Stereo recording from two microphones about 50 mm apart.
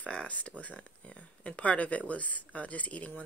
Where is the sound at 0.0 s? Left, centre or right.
Left.